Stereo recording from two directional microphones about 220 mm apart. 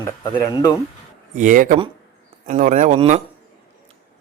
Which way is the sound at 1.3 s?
35° right (ahead or behind).